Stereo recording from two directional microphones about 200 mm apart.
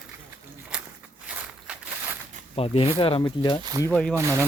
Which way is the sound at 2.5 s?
30° left (ahead or behind).